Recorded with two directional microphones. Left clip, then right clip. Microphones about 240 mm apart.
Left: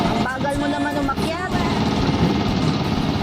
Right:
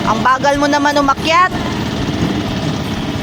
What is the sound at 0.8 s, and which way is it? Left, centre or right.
Speech, right.